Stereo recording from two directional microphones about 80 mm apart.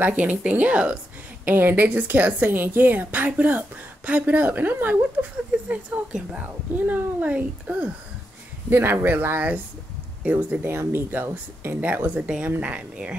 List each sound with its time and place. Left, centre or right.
0.0 s a woman's voice: centre
1.4 s a woman's voice: right
10.6 s a woman's voice: right; by 13.2 s centre